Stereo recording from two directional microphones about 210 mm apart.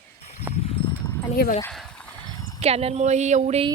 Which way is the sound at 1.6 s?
5° left (ahead or behind).